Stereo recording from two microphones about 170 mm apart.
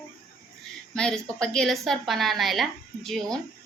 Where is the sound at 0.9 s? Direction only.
5° left (ahead or behind).